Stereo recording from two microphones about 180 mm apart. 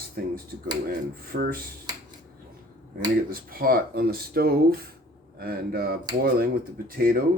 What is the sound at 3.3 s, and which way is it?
Speech, 55° right (ahead or behind).